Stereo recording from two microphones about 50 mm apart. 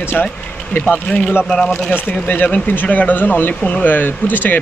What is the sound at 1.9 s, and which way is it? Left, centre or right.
Speech, left.